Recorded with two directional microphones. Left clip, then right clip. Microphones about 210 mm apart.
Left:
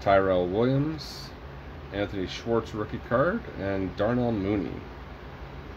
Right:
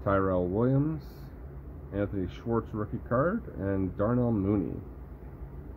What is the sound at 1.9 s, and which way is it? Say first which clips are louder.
Speech: left 2 dB; 15° right (ahead or behind).